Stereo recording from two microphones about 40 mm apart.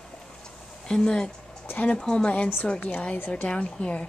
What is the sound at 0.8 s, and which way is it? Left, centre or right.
A woman's voice, centre.